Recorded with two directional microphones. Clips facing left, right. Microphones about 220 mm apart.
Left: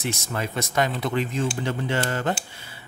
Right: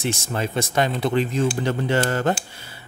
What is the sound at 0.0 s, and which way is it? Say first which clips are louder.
Speech: right 3 dB; 30° right (ahead or behind).